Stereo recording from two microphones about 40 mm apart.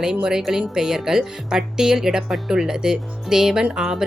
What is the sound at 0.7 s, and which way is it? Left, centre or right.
Speech, centre.